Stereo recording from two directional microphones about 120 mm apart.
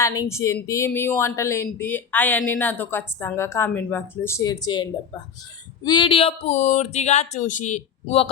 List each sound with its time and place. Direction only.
0.0 s a woman's voice: 30° left (ahead or behind)
4.4 s speech: 35° left (ahead or behind); by 7.8 s 90° left
8.0 s speech: 55° left (ahead or behind)